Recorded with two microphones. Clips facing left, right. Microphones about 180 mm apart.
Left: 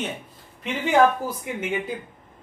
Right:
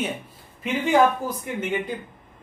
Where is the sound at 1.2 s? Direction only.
10° left (ahead or behind).